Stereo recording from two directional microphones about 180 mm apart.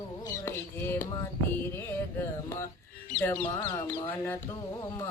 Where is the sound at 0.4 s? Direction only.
10° left (ahead or behind).